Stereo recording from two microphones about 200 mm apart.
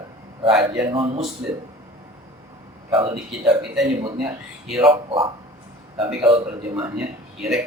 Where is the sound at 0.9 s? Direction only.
30° right (ahead or behind).